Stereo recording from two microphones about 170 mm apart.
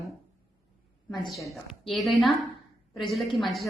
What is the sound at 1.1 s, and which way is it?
Speech, 25° left (ahead or behind).